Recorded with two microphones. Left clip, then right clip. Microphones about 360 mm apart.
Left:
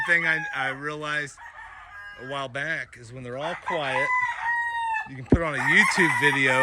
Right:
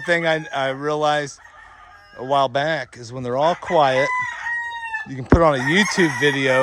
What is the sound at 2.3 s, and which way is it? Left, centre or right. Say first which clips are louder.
Speech: right 11 dB; centre.